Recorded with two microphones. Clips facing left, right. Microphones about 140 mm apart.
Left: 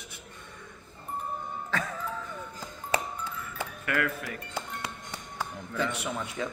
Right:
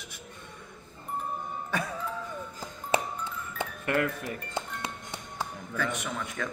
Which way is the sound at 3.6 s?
25° right (ahead or behind).